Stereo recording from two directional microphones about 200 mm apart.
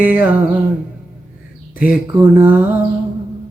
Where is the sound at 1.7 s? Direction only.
10° right (ahead or behind).